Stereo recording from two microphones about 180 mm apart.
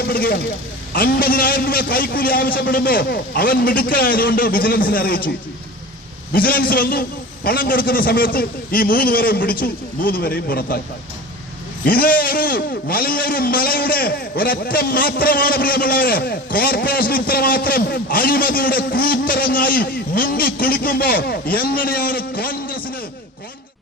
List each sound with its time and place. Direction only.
0.0 s a man's voice: 55° left (ahead or behind)
6.3 s a man's voice: 55° left (ahead or behind)
11.9 s a man's voice: 55° left (ahead or behind)